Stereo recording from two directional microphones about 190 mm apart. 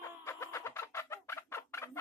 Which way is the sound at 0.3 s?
15° left (ahead or behind).